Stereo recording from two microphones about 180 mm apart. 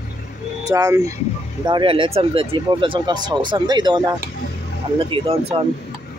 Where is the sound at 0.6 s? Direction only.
20° right (ahead or behind).